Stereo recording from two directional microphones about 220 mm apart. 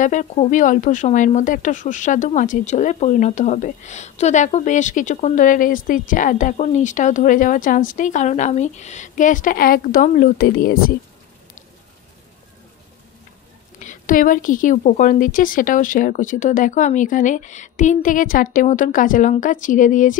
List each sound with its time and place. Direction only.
0.0 s a woman's voice: 35° left (ahead or behind)
13.7 s a woman's voice: 35° left (ahead or behind)